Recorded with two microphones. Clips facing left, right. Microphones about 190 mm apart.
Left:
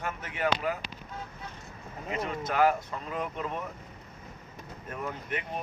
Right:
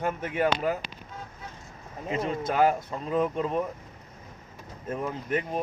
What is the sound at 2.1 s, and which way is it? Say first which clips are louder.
Speech: right 4 dB; 30° right (ahead or behind).